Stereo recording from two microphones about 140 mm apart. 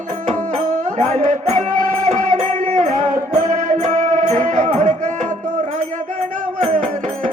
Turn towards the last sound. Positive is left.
turn(degrees=-55)  # may be behind; listen again after turning